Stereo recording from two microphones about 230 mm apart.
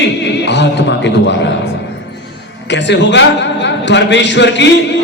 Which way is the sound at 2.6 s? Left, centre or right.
Left.